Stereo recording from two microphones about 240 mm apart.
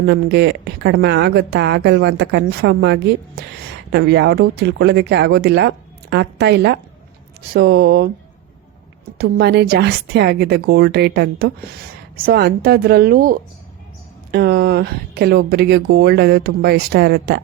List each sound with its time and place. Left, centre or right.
0.0 s speech: right
9.1 s speech: right